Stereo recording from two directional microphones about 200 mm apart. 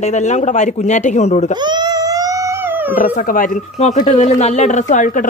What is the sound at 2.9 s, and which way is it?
Speech, 40° left (ahead or behind).